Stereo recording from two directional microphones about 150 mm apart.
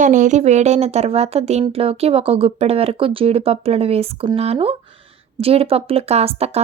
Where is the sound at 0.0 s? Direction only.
55° right (ahead or behind).